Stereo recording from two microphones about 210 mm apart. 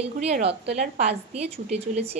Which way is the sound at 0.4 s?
30° right (ahead or behind).